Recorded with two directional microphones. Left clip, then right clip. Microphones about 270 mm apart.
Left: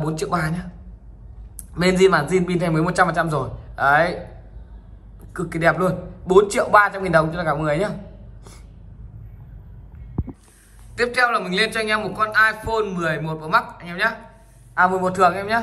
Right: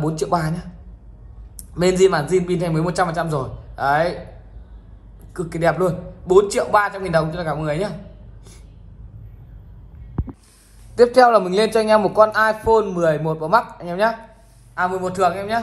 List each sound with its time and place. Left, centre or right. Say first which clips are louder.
0.0 s a man's voice: right 2 dB; centre
5.3 s a man's voice: even; centre
11.0 s a man's voice: right 7 dB; centre